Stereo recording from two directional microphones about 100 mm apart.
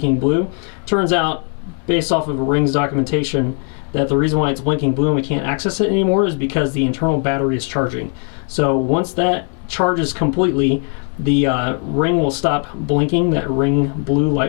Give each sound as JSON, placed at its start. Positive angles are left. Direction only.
{"t": 0.0, "sound": "speech", "side_deg": 15}